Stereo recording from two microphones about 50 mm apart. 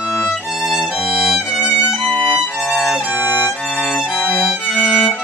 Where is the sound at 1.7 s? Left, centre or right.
Centre.